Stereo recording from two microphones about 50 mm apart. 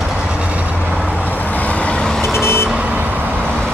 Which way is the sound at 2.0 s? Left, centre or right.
Centre.